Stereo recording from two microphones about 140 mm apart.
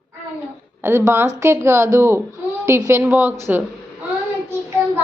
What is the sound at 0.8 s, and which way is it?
A woman's voice, 15° right (ahead or behind).